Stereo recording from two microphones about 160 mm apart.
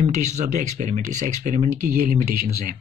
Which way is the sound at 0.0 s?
50° right (ahead or behind).